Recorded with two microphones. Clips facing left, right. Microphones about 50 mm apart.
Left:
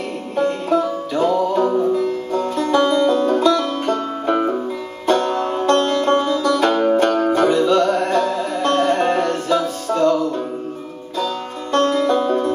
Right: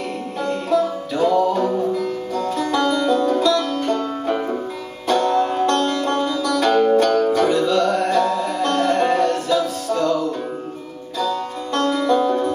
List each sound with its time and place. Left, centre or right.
0.4 s music: left
2.3 s music: left
6.7 s music: centre
7.0 s music: left
7.4 s music: centre
8.1 s music: left
9.2 s music: left
11.7 s music: left